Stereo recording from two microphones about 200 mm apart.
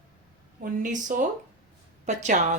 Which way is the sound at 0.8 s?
40° right (ahead or behind).